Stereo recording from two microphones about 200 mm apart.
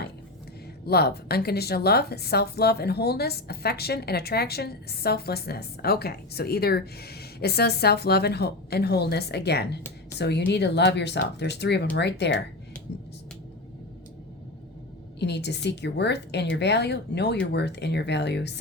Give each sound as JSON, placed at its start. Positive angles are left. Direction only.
{"t": 0.9, "sound": "a woman's voice", "side_deg": 50}
{"t": 15.2, "sound": "speech", "side_deg": 60}